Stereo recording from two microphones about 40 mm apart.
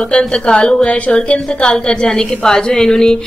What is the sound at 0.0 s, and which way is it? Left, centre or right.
A woman's voice, left.